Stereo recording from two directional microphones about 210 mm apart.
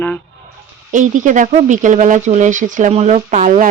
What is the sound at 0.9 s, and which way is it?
Speech, 35° right (ahead or behind).